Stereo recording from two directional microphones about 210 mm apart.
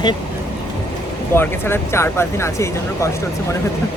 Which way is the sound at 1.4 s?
10° left (ahead or behind).